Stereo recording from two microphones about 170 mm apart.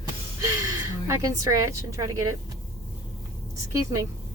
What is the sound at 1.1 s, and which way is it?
Speech, 15° right (ahead or behind).